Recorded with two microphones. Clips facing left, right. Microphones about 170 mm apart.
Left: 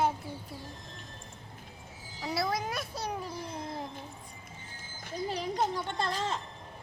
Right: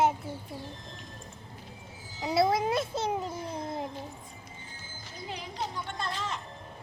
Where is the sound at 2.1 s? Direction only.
25° right (ahead or behind).